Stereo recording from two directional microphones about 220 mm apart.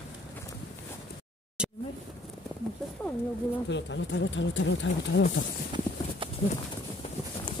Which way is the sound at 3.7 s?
55° left (ahead or behind).